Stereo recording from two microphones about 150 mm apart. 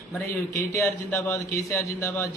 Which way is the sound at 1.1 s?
20° left (ahead or behind).